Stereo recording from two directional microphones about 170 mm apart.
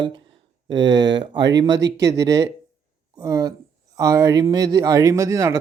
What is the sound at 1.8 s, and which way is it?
Speech, 90° right.